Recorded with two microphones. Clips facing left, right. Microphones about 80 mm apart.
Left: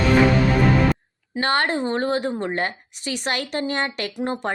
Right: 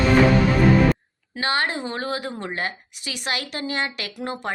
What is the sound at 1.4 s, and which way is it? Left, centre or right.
Speech, left.